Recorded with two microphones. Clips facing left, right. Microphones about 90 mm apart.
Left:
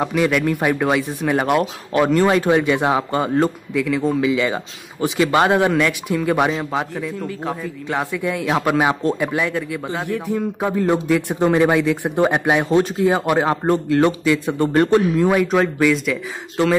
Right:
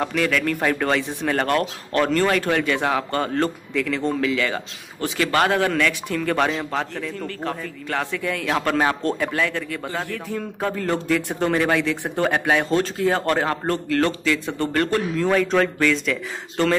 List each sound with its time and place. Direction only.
0.0 s speech: 15° left (ahead or behind)